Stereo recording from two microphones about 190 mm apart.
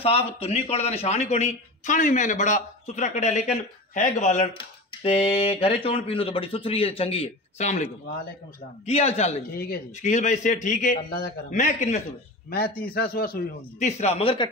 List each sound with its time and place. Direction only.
0.0 s a man's voice: 30° left (ahead or behind)
9.6 s a man's voice: 45° left (ahead or behind)
12.4 s speech: 55° left (ahead or behind)
13.7 s a man's voice: 35° left (ahead or behind)